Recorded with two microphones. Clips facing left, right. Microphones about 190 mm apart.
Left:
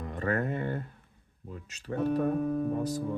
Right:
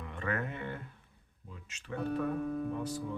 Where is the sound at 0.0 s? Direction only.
40° left (ahead or behind).